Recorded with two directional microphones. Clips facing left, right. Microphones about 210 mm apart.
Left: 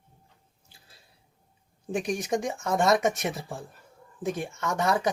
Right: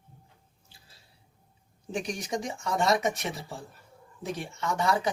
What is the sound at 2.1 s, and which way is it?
Speech, 50° left (ahead or behind).